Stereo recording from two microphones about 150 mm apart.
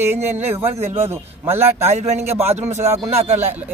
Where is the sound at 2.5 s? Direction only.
50° right (ahead or behind).